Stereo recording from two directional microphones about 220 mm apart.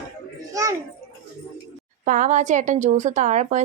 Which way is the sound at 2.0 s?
35° right (ahead or behind).